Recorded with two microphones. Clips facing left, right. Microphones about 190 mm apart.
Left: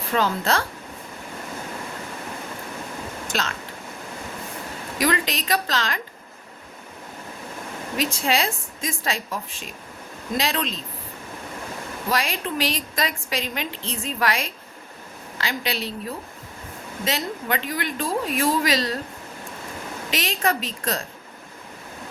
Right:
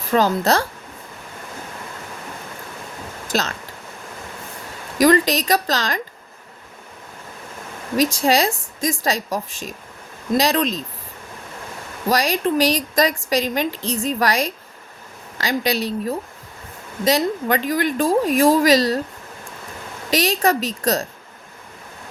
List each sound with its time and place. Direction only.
0.1 s a woman's voice: 40° right (ahead or behind)
3.3 s a woman's voice: 40° right (ahead or behind)
4.9 s a woman's voice: 40° right (ahead or behind)
7.9 s a woman's voice: 40° right (ahead or behind)
12.0 s a woman's voice: 40° right (ahead or behind)
20.1 s a woman's voice: 40° right (ahead or behind)